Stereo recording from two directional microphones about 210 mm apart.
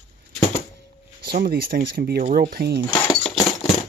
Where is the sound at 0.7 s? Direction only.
50° right (ahead or behind).